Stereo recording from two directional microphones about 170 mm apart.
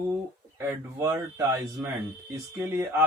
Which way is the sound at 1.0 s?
15° right (ahead or behind).